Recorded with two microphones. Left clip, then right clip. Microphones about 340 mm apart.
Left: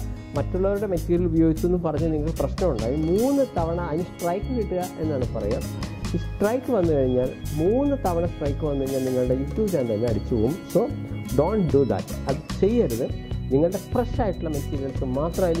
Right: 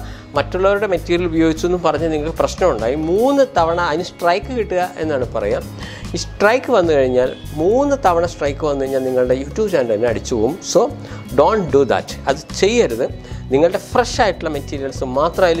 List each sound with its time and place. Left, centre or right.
0.4 s speech: centre
3.1 s speech: right
3.3 s speech: centre
11.3 s speech: centre